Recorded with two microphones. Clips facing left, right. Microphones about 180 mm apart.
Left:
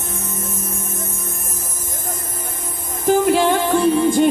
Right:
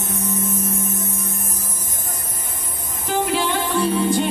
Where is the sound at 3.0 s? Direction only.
50° left (ahead or behind).